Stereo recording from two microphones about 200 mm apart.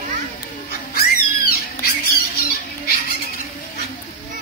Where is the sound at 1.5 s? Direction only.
50° left (ahead or behind).